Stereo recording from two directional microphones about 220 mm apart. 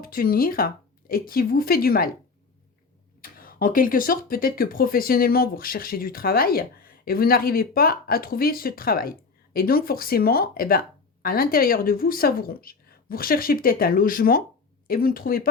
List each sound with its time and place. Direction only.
0.0 s speech: 40° left (ahead or behind)
3.3 s speech: 40° left (ahead or behind)